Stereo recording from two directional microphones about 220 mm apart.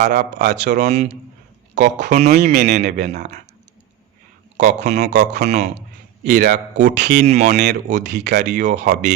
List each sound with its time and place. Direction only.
0.0 s speech: 45° right (ahead or behind)
0.5 s speech: 40° right (ahead or behind)
2.3 s speech: 45° right (ahead or behind)
2.8 s speech: 45° right (ahead or behind)
3.2 s speech: 30° right (ahead or behind)
4.5 s speech: 30° right (ahead or behind)
6.2 s speech: 45° right (ahead or behind)
7.3 s speech: 30° right (ahead or behind)
7.5 s speech: 50° right (ahead or behind)
8.5 s speech: 35° right (ahead or behind)